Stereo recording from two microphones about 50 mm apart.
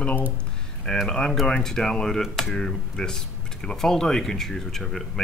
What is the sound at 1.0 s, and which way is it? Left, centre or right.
Speech, centre.